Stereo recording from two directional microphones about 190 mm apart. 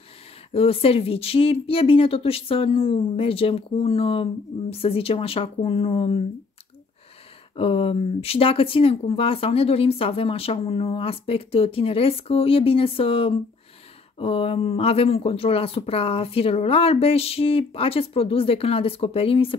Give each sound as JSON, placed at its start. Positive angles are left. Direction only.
{"t": 0.5, "sound": "speech", "side_deg": 30}
{"t": 7.5, "sound": "speech", "side_deg": 30}